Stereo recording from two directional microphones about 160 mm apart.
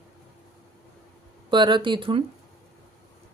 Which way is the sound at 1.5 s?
30° right (ahead or behind).